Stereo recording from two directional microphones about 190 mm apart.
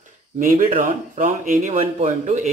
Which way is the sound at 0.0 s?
40° right (ahead or behind).